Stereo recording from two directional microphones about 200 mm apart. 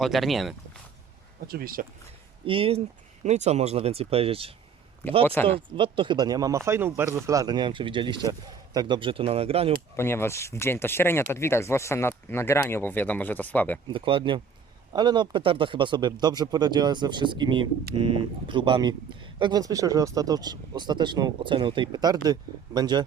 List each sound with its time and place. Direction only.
0.0 s speech: centre (ahead or behind)
1.5 s speech: 45° right (ahead or behind)
2.5 s speech: 25° right (ahead or behind)
5.2 s speech: 10° left (ahead or behind)
5.5 s speech: 25° right (ahead or behind)
9.9 s speech: 10° left (ahead or behind)
13.8 s speech: 25° right (ahead or behind)